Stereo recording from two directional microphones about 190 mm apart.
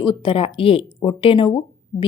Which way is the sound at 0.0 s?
25° left (ahead or behind).